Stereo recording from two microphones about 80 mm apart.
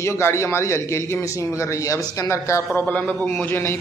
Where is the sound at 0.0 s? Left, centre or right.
Left.